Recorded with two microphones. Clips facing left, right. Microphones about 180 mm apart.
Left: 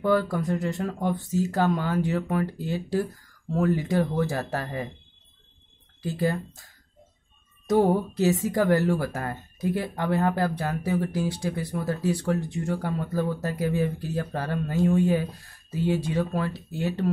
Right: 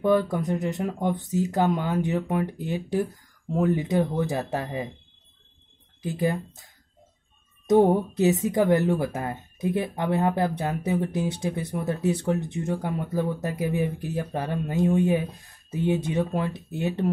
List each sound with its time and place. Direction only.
0.0 s a woman's voice: 20° right (ahead or behind)
6.0 s a woman's voice: 20° right (ahead or behind)